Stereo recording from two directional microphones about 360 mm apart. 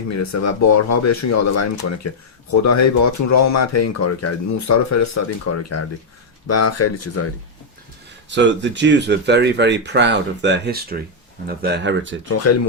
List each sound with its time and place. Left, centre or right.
0.1 s speech: left
8.4 s speech: right
12.3 s speech: left